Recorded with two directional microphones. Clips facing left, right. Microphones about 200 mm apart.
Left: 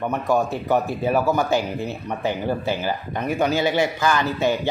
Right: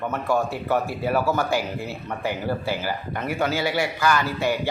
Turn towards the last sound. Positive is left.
turn(degrees=20)  # may be behind; listen again after turning